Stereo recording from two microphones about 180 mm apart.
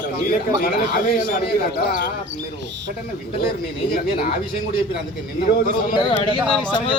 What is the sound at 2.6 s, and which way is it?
Speech, 80° right.